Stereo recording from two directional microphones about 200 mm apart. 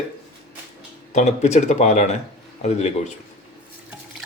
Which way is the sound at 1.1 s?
35° left (ahead or behind).